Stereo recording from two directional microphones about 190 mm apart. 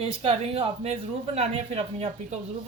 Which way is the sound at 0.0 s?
30° right (ahead or behind).